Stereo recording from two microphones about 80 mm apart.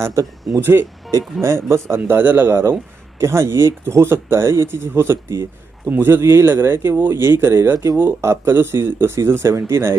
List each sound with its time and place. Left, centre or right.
0.0 s a man's voice: right
0.6 s a man's voice: right
2.0 s a man's voice: right